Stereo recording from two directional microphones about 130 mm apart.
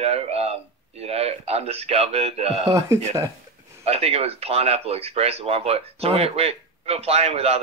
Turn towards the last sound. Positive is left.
turn(degrees=-50)  # may be behind; listen again after turning